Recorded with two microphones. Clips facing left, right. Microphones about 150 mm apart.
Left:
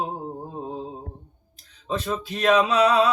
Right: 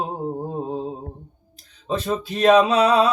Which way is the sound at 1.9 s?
30° right (ahead or behind).